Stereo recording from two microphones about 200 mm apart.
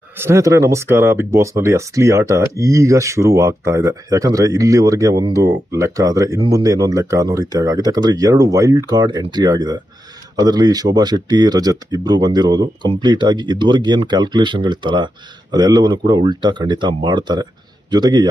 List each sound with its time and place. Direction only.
0.2 s speech: 15° right (ahead or behind)